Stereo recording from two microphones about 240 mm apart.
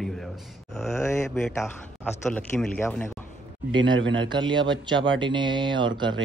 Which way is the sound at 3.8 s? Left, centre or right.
Right.